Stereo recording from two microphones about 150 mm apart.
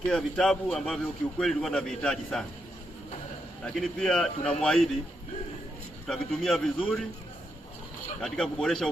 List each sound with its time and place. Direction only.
0.1 s a man's voice: 5° left (ahead or behind)
3.6 s a man's voice: 5° left (ahead or behind)
6.1 s a man's voice: centre (ahead or behind)
8.2 s a man's voice: 5° left (ahead or behind)